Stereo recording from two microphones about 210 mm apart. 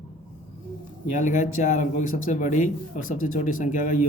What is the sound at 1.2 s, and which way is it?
Speech, 35° left (ahead or behind).